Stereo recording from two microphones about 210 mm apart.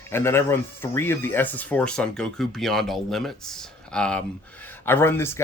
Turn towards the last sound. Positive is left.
turn(degrees=10)  # may be behind; listen again after turning